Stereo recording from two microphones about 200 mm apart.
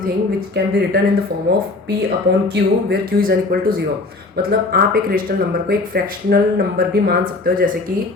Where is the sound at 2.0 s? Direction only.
50° right (ahead or behind).